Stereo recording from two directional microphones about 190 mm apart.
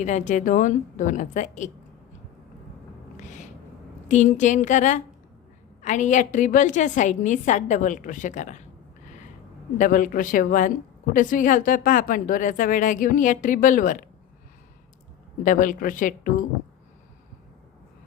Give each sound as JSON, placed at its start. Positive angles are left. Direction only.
{"t": 0.0, "sound": "a woman's voice", "side_deg": 40}
{"t": 3.2, "sound": "a sound", "side_deg": 40}
{"t": 4.1, "sound": "a woman's voice", "side_deg": 40}
{"t": 9.7, "sound": "speech", "side_deg": 45}
{"t": 15.4, "sound": "speech", "side_deg": 45}